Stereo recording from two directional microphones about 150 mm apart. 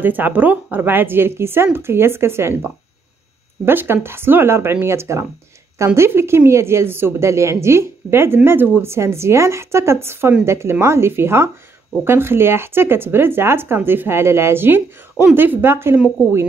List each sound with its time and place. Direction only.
0.0 s speech: 10° right (ahead or behind)